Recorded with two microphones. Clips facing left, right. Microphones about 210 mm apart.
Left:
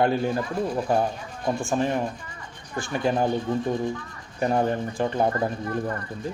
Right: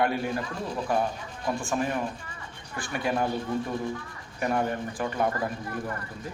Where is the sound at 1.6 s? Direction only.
25° left (ahead or behind).